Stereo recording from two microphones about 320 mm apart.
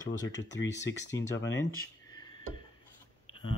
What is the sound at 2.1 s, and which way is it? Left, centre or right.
Dishes, centre.